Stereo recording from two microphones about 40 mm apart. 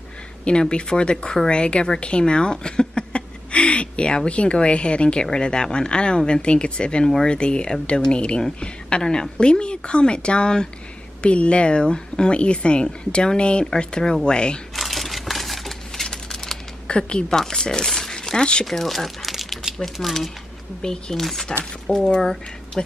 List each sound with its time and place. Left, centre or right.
0.5 s speech: left
14.8 s a sound: centre
16.8 s speech: left
18.7 s speech: centre
20.8 s speech: centre
21.2 s speech: centre
21.8 s speech: centre